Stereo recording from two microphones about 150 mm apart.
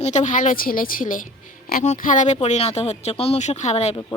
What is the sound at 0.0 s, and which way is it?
Speech, 50° left (ahead or behind).